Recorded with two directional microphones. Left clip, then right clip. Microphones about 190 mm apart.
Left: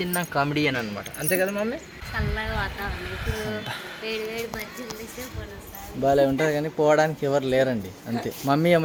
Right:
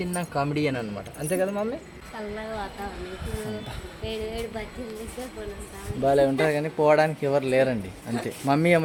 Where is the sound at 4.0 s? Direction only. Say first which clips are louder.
Left 1 dB; 20° right (ahead or behind).